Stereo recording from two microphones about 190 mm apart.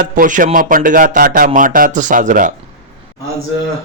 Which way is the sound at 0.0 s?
45° right (ahead or behind).